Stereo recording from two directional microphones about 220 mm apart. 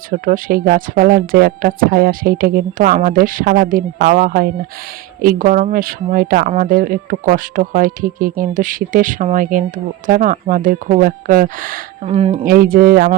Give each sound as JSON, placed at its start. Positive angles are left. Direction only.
{"t": 0.1, "sound": "speech", "side_deg": -40}
{"t": 12.5, "sound": "speech", "side_deg": -40}